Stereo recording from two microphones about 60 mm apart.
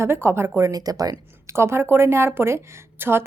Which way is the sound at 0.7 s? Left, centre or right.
Right.